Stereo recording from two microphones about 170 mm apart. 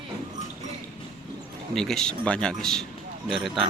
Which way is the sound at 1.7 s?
5° left (ahead or behind).